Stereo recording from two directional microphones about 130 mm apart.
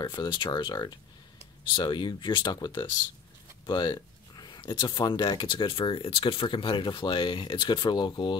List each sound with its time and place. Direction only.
0.0 s speech: 35° left (ahead or behind)